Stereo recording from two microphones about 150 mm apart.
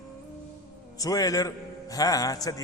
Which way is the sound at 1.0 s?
25° left (ahead or behind).